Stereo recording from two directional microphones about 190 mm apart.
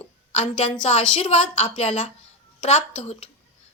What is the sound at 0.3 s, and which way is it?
A woman's voice, 30° left (ahead or behind).